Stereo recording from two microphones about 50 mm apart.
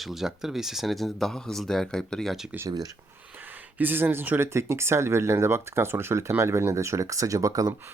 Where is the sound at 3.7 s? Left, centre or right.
Right.